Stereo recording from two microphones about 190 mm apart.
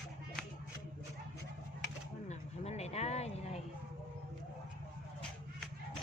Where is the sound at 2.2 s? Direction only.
35° left (ahead or behind).